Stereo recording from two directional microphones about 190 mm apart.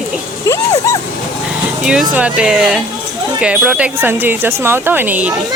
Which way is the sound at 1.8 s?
5° right (ahead or behind).